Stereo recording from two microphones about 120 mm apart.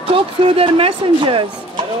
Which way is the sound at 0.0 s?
50° right (ahead or behind).